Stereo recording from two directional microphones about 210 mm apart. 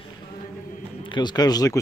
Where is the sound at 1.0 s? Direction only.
20° left (ahead or behind).